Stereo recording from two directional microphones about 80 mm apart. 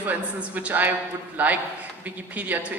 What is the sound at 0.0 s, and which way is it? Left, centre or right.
A woman's voice, centre.